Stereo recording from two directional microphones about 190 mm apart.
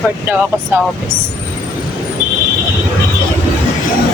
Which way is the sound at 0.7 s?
10° right (ahead or behind).